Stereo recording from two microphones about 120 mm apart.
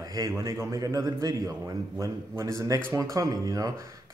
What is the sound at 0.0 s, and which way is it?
A man's voice, 30° right (ahead or behind).